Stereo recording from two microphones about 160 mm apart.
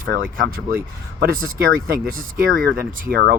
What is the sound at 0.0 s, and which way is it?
Speech, 60° right (ahead or behind).